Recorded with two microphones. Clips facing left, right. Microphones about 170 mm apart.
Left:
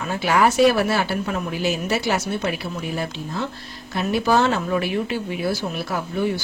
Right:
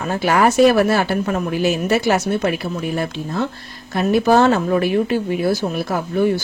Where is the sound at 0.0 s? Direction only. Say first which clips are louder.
Right 3 dB; 45° right (ahead or behind).